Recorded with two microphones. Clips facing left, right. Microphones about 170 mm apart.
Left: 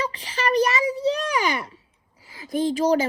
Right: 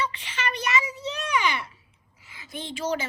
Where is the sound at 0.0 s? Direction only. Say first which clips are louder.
Left 4 dB; 35° left (ahead or behind).